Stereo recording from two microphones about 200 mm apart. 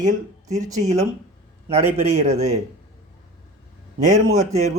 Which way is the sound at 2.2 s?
35° right (ahead or behind).